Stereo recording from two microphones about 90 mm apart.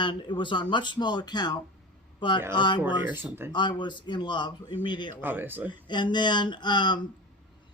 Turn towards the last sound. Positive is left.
turn(degrees=55)  # may be behind; listen again after turning